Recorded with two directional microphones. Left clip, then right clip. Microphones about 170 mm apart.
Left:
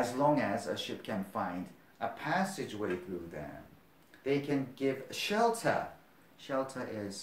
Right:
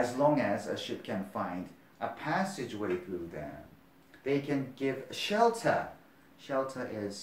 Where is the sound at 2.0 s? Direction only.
30° left (ahead or behind).